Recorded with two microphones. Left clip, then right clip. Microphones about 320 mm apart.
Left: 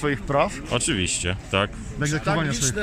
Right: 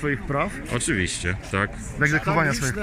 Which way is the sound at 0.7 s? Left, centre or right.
Centre.